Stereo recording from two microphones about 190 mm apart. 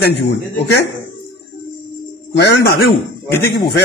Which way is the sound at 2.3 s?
60° left (ahead or behind).